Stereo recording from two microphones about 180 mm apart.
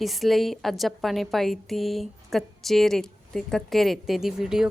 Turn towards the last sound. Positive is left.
turn(degrees=-5)  # may be behind; listen again after turning